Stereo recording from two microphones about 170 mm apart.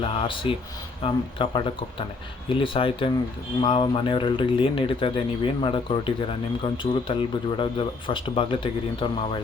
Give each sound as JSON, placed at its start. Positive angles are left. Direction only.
{"t": 0.0, "sound": "speech", "side_deg": 30}